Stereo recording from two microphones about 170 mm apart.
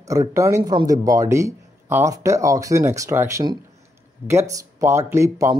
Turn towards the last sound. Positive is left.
turn(degrees=-15)  # may be behind; listen again after turning